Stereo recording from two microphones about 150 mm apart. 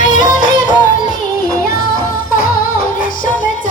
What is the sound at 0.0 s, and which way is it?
Music, 60° left (ahead or behind).